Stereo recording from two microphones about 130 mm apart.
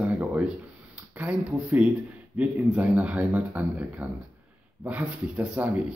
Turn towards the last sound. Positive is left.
turn(degrees=-10)  # may be behind; listen again after turning